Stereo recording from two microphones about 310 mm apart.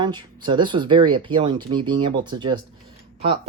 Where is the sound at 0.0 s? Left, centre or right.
Centre.